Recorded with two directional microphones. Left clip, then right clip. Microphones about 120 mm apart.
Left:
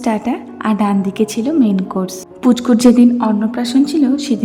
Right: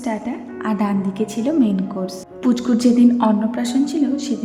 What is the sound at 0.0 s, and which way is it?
A woman's voice, 25° left (ahead or behind).